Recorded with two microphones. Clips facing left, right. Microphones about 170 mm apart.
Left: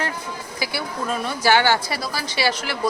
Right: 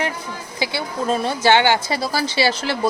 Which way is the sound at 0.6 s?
25° right (ahead or behind).